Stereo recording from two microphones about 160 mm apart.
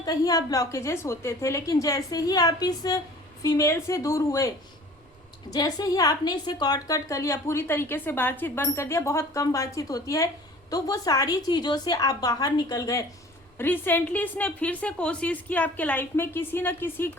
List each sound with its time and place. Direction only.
0.0 s a woman's voice: 25° left (ahead or behind)